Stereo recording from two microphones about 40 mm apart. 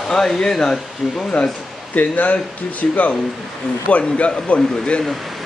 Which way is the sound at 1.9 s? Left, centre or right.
Left.